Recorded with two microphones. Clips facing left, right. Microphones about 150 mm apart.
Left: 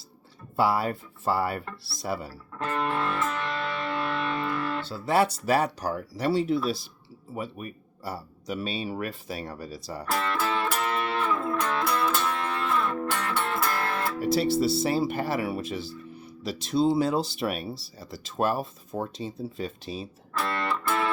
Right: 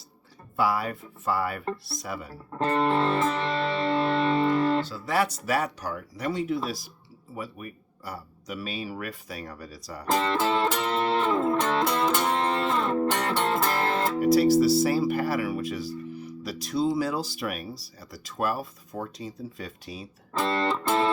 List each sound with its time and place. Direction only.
0.5 s speech: 30° left (ahead or behind)
2.5 s music: 35° right (ahead or behind)
4.9 s speech: 30° left (ahead or behind)
10.1 s music: 20° right (ahead or behind)
14.2 s speech: 25° left (ahead or behind)
20.3 s music: 25° right (ahead or behind)